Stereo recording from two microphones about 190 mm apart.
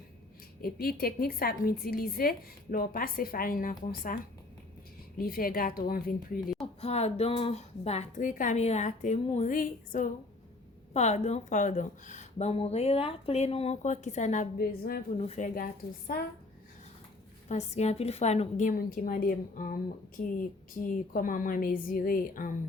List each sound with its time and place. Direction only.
0.6 s a woman's voice: 50° left (ahead or behind)
5.1 s a woman's voice: 50° left (ahead or behind)
6.8 s speech: 35° left (ahead or behind)
14.6 s a woman's voice: 50° left (ahead or behind)
15.2 s a woman's voice: 40° left (ahead or behind)
17.5 s a woman's voice: 35° left (ahead or behind)